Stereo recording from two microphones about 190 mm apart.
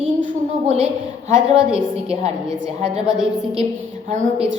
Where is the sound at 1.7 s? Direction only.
35° right (ahead or behind).